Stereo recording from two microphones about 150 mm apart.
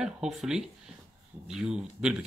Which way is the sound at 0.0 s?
5° right (ahead or behind).